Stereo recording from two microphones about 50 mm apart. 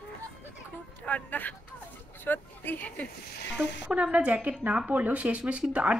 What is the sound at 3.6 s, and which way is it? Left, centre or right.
A woman's voice, right.